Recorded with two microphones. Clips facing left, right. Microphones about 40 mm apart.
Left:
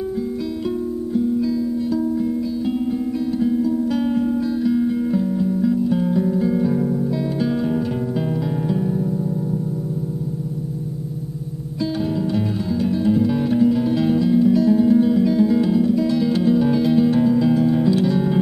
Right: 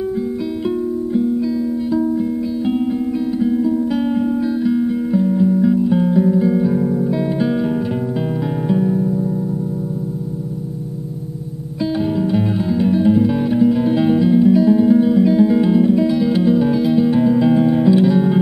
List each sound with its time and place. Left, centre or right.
1.9 s music: right
3.3 s music: centre
12.2 s music: centre
16.1 s music: centre